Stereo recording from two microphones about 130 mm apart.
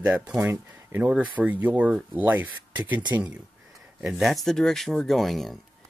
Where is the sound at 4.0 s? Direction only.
5° right (ahead or behind).